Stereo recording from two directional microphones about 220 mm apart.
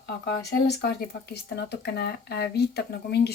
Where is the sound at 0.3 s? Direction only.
45° left (ahead or behind).